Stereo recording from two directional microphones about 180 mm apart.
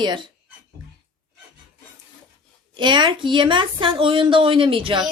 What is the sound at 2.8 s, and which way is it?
Speech, 25° right (ahead or behind).